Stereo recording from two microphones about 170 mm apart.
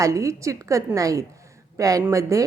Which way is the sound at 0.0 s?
20° right (ahead or behind).